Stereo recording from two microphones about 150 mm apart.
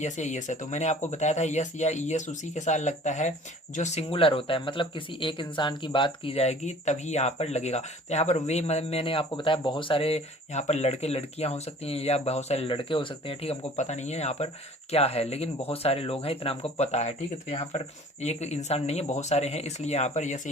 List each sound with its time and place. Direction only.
0.0 s speech: 50° left (ahead or behind)